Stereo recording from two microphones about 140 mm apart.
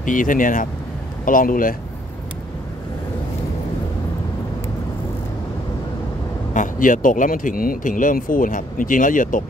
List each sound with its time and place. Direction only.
0.0 s speech: 70° left (ahead or behind)
6.5 s speech: 65° left (ahead or behind)